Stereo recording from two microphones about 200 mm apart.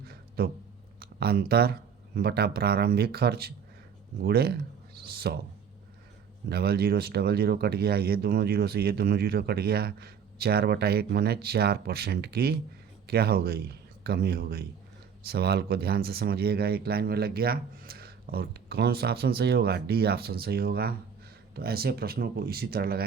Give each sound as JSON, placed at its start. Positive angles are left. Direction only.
{"t": 0.1, "sound": "a sound", "side_deg": -50}
{"t": 0.9, "sound": "speech", "side_deg": -50}
{"t": 6.5, "sound": "speech", "side_deg": -50}